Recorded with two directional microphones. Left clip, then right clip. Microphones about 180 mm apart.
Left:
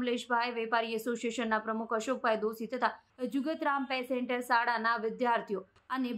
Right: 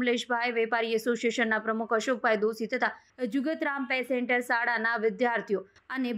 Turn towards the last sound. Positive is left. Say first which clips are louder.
# right 2 dB
turn(degrees=-20)  # may be behind; listen again after turning